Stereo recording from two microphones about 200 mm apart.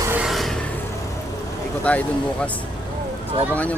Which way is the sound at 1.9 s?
5° left (ahead or behind).